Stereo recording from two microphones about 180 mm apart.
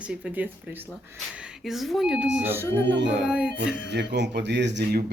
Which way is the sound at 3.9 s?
75° right (ahead or behind).